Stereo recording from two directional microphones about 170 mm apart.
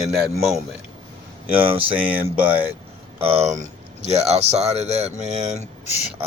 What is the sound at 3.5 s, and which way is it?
Speech, 40° right (ahead or behind).